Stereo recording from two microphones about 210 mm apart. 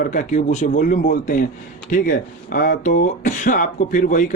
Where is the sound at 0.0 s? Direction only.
40° left (ahead or behind).